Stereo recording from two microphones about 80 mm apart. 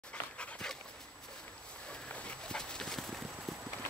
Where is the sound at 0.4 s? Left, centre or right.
Centre.